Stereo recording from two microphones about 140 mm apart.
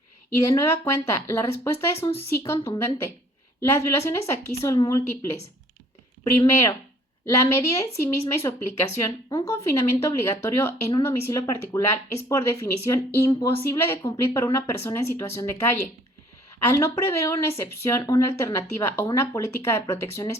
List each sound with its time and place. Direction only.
0.3 s a woman's voice: 20° left (ahead or behind)